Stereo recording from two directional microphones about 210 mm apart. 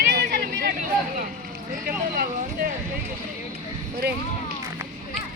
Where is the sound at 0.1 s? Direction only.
55° right (ahead or behind).